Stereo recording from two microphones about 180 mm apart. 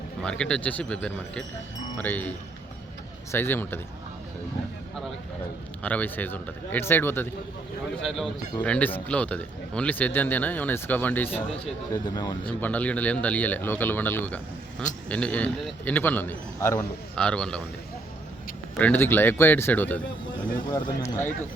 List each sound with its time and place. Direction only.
0.2 s speech: 5° left (ahead or behind)
3.3 s speech: 10° left (ahead or behind)
5.8 s speech: 10° left (ahead or behind)
8.0 s speech: centre (ahead or behind)
12.0 s speech: 25° left (ahead or behind)
12.5 s speech: 10° left (ahead or behind)
18.8 s speech: 10° left (ahead or behind)
20.7 s speech: 20° left (ahead or behind)